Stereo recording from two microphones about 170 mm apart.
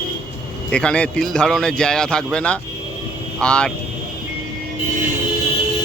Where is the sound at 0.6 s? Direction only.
5° left (ahead or behind).